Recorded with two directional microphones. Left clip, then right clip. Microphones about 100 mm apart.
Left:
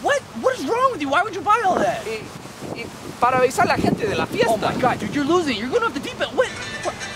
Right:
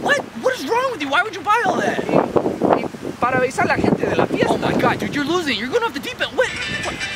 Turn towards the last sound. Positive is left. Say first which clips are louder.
# right 4 dB
turn(degrees=-15)  # may be behind; listen again after turning